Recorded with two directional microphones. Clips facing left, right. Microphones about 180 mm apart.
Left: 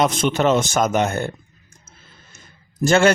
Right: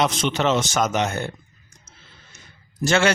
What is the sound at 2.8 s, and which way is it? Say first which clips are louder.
Speech: left 4 dB; 50° left (ahead or behind).